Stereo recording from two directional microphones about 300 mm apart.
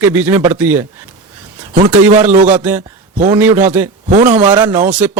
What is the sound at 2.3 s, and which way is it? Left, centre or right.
Speech, right.